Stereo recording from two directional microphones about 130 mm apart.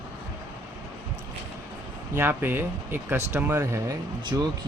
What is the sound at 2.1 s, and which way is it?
Speech, 15° right (ahead or behind).